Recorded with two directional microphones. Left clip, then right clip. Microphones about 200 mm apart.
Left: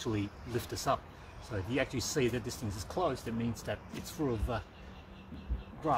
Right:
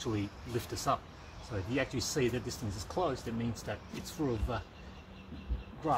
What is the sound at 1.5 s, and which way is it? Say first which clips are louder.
Speech: left 1 dB; 20° left (ahead or behind).